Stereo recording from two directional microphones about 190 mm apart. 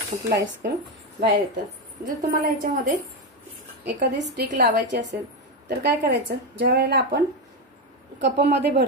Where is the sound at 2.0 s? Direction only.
50° right (ahead or behind).